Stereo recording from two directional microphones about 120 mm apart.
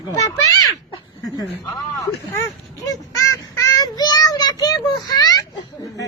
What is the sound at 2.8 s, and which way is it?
Child singing, 30° left (ahead or behind).